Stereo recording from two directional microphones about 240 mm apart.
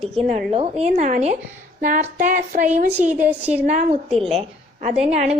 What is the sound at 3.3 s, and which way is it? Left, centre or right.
Speech, centre.